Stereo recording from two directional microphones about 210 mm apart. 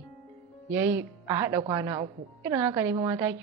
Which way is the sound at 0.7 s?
10° right (ahead or behind).